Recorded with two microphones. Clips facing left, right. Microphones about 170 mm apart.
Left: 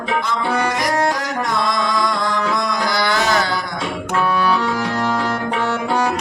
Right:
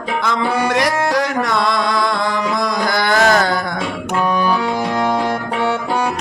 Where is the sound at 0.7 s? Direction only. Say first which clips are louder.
Right 3 dB; 70° right (ahead or behind).